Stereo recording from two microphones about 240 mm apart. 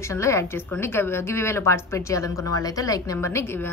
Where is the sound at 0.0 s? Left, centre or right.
Centre.